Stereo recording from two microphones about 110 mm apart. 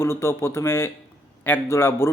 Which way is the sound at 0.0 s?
25° left (ahead or behind).